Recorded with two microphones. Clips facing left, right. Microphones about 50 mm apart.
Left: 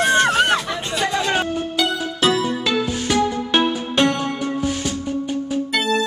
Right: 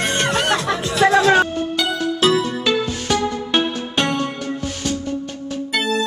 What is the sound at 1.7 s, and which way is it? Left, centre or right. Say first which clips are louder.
Music: right 2 dB; centre.